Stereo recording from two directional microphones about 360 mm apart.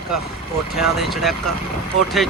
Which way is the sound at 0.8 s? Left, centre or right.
Centre.